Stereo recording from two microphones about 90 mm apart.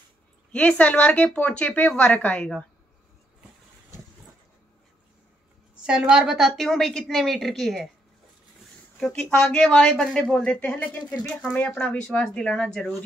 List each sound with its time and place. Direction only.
0.5 s a woman's voice: 15° left (ahead or behind)
5.9 s a woman's voice: 10° right (ahead or behind)
9.0 s a woman's voice: 5° left (ahead or behind)